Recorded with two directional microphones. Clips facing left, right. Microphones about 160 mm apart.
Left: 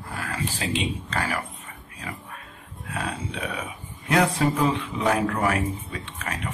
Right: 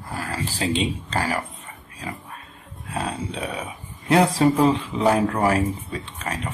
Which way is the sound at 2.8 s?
30° right (ahead or behind).